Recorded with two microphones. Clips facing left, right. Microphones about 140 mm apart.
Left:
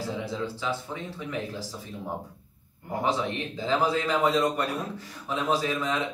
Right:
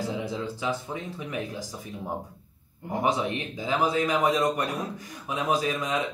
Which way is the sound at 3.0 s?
15° right (ahead or behind).